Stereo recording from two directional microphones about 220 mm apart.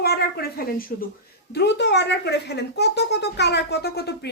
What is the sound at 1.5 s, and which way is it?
Speech, 50° left (ahead or behind).